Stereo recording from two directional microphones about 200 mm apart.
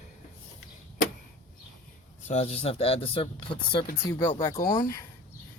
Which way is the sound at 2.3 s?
30° left (ahead or behind).